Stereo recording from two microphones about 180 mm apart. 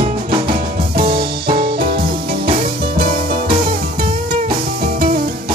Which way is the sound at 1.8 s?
55° right (ahead or behind).